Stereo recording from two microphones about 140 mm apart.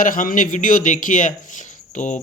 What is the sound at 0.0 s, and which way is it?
Speech, 75° left (ahead or behind).